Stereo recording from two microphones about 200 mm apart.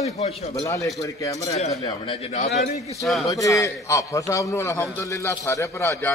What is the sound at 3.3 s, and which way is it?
A man's voice, 15° left (ahead or behind).